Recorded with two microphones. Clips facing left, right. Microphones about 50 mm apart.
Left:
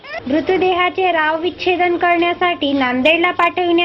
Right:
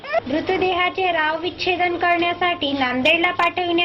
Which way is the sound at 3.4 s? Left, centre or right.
Centre.